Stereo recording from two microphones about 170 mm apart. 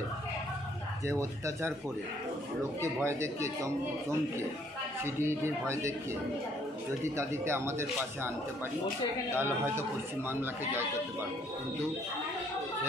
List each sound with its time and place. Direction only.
1.0 s a man's voice: 15° right (ahead or behind)
2.8 s a man's voice: 15° right (ahead or behind)
7.2 s a man's voice: 15° right (ahead or behind)
9.3 s a man's voice: 15° right (ahead or behind)